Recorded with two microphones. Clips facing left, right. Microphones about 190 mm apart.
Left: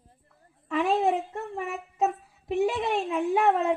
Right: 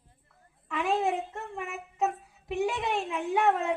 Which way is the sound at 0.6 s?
30° left (ahead or behind).